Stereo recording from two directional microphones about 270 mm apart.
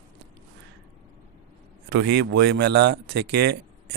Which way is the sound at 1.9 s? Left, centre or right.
Right.